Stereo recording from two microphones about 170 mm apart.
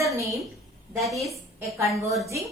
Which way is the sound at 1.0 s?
Centre (ahead or behind).